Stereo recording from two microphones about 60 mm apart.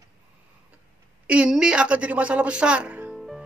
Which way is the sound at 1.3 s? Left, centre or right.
Centre.